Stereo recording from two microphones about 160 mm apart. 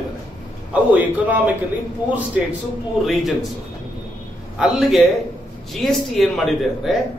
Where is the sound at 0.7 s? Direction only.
10° right (ahead or behind).